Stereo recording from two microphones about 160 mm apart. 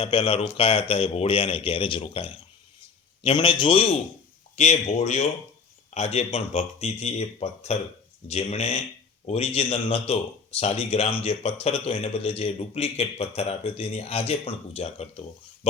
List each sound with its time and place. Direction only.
0.0 s a man's voice: 35° left (ahead or behind)